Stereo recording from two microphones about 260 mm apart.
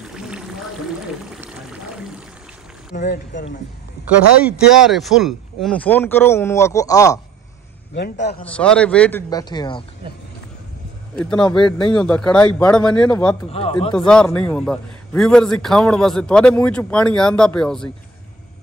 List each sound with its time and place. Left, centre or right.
0.0 s a sound: centre
1.4 s water: centre
2.9 s speech: left
4.5 s speech: centre
7.9 s speech: left
8.5 s speech: centre
11.1 s a man's voice: centre
13.5 s speech: left
13.9 s a man's voice: centre